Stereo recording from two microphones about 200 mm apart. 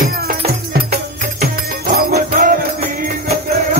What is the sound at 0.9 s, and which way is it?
Music, 50° right (ahead or behind).